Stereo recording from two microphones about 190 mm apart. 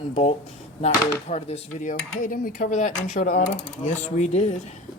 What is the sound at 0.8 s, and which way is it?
Dishes, 35° left (ahead or behind).